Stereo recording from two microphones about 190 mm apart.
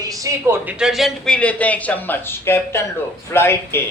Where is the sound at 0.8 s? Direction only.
Centre (ahead or behind).